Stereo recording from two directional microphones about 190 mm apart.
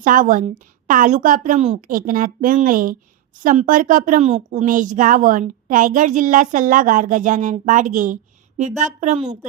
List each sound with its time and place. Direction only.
0.0 s a woman's voice: 45° right (ahead or behind)